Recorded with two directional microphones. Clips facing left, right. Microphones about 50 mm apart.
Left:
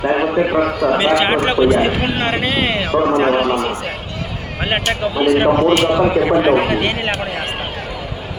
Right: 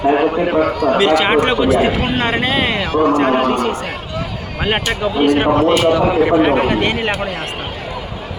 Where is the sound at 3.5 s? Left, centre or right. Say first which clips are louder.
Right 1 dB; centre.